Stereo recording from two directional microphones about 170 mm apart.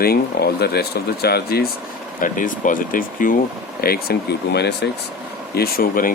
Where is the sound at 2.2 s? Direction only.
50° left (ahead or behind).